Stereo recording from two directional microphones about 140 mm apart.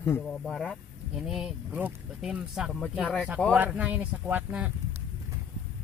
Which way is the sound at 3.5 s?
10° right (ahead or behind).